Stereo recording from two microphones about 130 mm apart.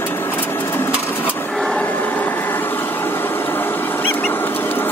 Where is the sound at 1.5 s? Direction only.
5° left (ahead or behind).